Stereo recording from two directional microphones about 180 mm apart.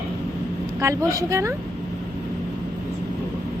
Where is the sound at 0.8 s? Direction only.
15° right (ahead or behind).